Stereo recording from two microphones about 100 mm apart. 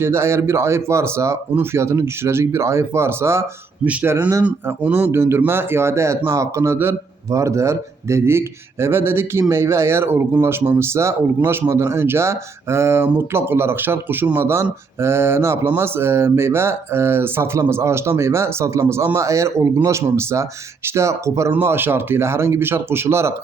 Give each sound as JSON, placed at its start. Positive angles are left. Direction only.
{"t": 0.0, "sound": "speech", "side_deg": -25}
{"t": 4.4, "sound": "speech", "side_deg": -15}